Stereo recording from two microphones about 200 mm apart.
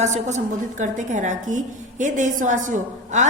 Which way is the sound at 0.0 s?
35° right (ahead or behind).